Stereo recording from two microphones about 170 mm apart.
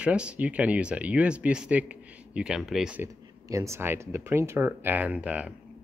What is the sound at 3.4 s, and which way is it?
Speech, 20° right (ahead or behind).